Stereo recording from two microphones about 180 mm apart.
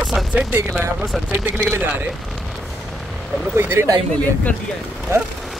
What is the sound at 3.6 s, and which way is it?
Speech, 15° right (ahead or behind).